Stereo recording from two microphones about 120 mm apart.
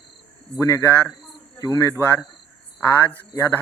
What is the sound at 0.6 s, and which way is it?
Speech, 25° left (ahead or behind).